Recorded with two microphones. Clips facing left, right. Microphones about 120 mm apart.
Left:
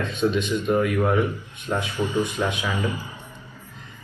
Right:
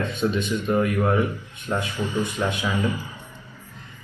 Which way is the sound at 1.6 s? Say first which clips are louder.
Left 1 dB; 15° left (ahead or behind).